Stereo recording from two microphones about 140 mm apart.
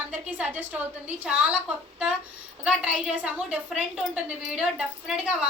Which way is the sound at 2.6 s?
5° right (ahead or behind).